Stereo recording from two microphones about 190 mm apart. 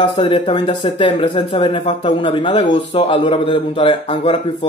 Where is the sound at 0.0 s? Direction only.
30° left (ahead or behind).